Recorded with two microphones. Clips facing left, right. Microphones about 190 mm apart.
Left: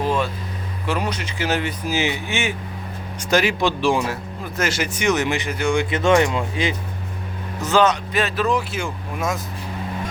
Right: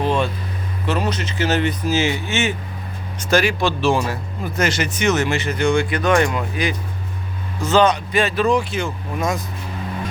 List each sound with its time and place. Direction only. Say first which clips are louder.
0.0 s vehicle: right 2 dB; 5° left (ahead or behind)
0.9 s speech: right 2 dB; 10° left (ahead or behind)
5.8 s speech: left 1 dB; 25° left (ahead or behind)
7.8 s speech: right 2 dB; centre (ahead or behind)